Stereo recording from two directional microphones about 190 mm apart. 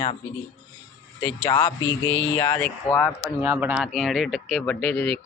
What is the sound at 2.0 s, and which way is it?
Speech, 90° left.